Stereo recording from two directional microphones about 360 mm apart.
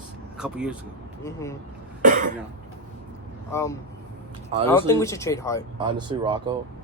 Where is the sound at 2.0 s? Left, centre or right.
Right.